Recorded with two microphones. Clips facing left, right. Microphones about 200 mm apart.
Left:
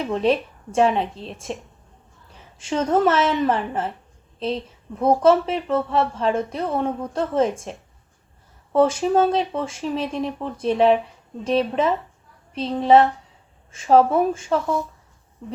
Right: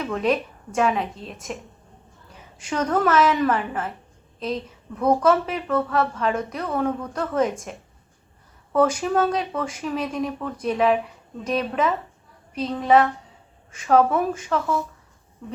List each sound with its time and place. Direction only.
0.0 s a woman's voice: 30° left (ahead or behind)